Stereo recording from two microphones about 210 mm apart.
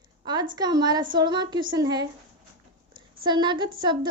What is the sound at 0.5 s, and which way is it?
A woman's voice, 20° right (ahead or behind).